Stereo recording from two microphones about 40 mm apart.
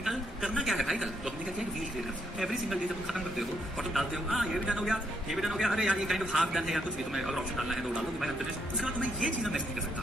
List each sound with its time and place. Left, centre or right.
0.0 s a sound: centre
2.4 s speech: centre
4.6 s a woman's voice: centre
5.3 s speech: centre
8.8 s speech: right